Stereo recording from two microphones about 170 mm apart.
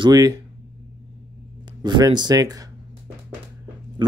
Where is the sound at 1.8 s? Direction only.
25° right (ahead or behind).